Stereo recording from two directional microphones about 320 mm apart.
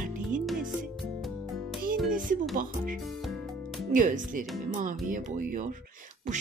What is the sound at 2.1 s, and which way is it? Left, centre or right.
Music, right.